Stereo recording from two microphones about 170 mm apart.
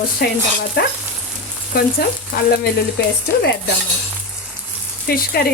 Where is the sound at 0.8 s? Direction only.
65° left (ahead or behind).